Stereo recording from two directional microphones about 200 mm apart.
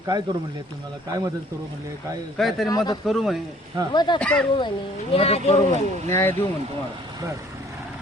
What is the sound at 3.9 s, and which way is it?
Speech, 20° left (ahead or behind).